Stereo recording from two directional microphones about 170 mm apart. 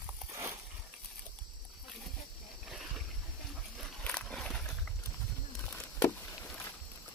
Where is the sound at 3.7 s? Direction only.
5° left (ahead or behind).